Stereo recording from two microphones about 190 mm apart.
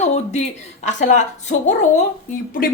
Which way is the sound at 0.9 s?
40° left (ahead or behind).